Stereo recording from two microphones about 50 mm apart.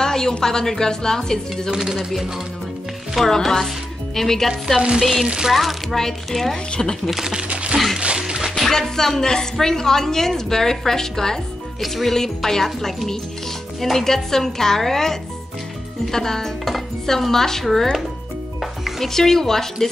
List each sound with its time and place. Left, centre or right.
0.0 s a woman's voice: centre
1.7 s speech: centre
3.2 s speech: centre
4.5 s a woman's voice: centre
7.1 s speech: centre
7.4 s a sound: right
8.2 s music: centre
8.5 s a woman's voice: centre
18.6 s music: centre
19.0 s a woman's voice: centre